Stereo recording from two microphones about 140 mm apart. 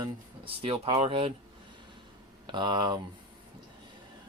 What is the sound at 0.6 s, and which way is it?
Speech, 50° right (ahead or behind).